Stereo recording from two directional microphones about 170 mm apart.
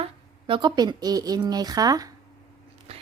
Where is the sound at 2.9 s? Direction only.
35° right (ahead or behind).